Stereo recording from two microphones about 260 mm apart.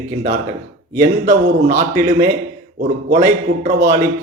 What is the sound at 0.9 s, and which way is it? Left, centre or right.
A man's voice, right.